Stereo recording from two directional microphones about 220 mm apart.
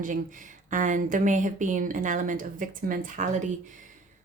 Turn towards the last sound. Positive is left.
turn(degrees=-35)  # may be behind; listen again after turning